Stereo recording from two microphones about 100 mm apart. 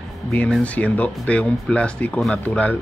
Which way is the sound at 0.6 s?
15° left (ahead or behind).